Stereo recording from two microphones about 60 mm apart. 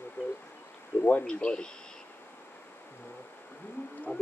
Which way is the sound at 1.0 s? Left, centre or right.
Left.